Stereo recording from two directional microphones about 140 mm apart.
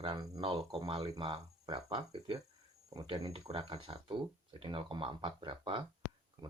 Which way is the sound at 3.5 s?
50° right (ahead or behind).